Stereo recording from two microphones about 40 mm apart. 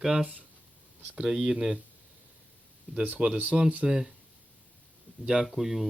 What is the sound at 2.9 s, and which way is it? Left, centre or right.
Speech, right.